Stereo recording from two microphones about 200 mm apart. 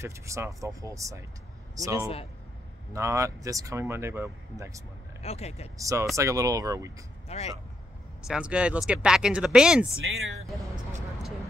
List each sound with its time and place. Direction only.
0.0 s speech: 15° right (ahead or behind)
5.2 s speech: 30° left (ahead or behind)
5.8 s speech: 15° right (ahead or behind)
7.2 s speech: 35° left (ahead or behind)
8.3 s speech: 5° right (ahead or behind)
9.9 s speech: 75° right (ahead or behind)